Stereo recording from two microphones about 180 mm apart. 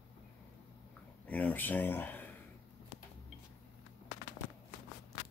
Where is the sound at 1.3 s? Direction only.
10° left (ahead or behind).